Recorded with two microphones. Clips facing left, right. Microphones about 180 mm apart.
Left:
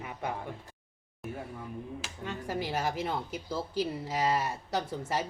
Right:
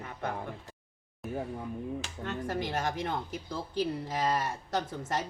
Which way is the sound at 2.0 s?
10° left (ahead or behind).